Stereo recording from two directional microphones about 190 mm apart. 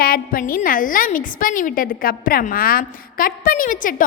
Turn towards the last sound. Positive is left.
turn(degrees=45)  # may be behind; listen again after turning